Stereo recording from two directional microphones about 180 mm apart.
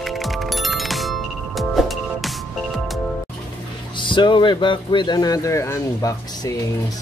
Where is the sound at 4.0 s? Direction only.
25° left (ahead or behind).